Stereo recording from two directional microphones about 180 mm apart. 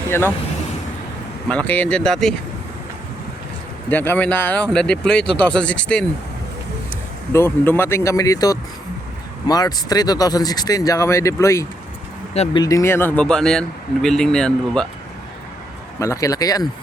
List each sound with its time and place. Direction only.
1.5 s speech: 5° left (ahead or behind)
3.8 s speech: 10° left (ahead or behind)
7.3 s a man's voice: 10° left (ahead or behind)
16.0 s speech: 15° left (ahead or behind)